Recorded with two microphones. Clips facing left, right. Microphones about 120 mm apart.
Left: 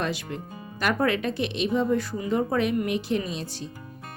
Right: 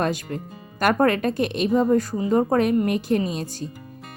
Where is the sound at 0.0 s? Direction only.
45° right (ahead or behind).